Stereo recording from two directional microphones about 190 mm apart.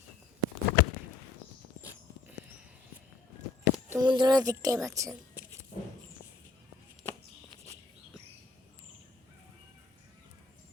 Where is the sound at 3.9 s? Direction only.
20° right (ahead or behind).